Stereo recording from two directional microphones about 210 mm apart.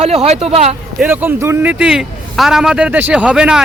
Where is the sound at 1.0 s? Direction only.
10° right (ahead or behind).